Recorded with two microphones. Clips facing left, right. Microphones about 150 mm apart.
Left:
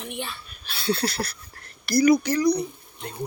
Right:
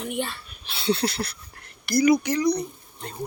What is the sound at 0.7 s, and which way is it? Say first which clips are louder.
Speech: right 1 dB; 20° right (ahead or behind).